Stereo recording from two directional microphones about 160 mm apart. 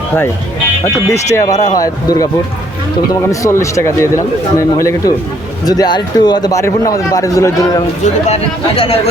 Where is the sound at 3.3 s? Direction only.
20° left (ahead or behind).